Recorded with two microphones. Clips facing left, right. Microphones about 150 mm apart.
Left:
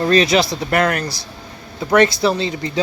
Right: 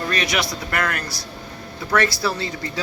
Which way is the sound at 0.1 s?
30° left (ahead or behind).